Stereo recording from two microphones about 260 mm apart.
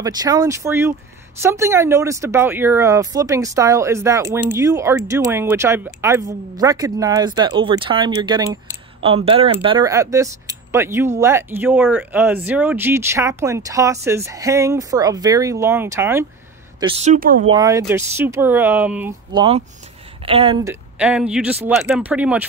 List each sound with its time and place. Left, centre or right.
0.0 s speech: centre
16.8 s speech: right
17.5 s speech: centre
19.3 s speech: centre
21.0 s speech: centre